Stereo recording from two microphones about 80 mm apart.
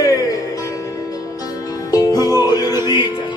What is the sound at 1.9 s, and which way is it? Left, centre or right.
Music, left.